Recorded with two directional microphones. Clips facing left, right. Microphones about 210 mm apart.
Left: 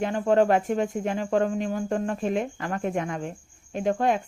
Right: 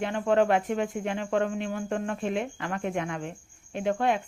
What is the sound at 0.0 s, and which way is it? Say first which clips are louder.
Speech: left 3 dB; 40° left (ahead or behind).